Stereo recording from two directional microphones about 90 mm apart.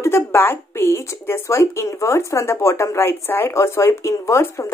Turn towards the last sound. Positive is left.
turn(degrees=30)  # may be behind; listen again after turning